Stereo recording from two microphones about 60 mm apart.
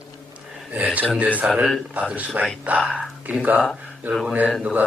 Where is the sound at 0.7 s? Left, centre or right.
Right.